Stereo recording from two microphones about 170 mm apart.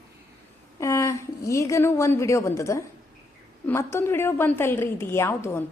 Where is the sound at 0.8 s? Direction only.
15° left (ahead or behind).